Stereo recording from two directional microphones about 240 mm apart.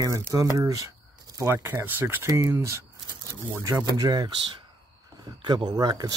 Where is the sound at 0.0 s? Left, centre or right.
Centre.